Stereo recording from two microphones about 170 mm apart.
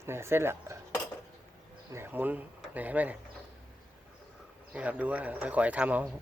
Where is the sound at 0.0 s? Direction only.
15° right (ahead or behind).